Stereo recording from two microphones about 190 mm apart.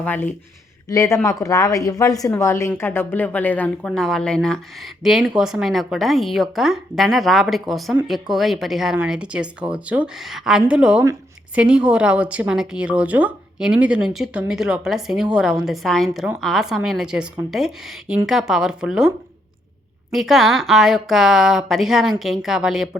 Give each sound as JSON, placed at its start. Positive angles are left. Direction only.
{"t": 0.0, "sound": "a woman's voice", "side_deg": 10}
{"t": 11.0, "sound": "a sound", "side_deg": -15}
{"t": 11.6, "sound": "speech", "side_deg": -5}